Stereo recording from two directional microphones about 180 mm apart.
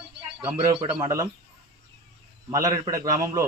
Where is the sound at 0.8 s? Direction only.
30° right (ahead or behind).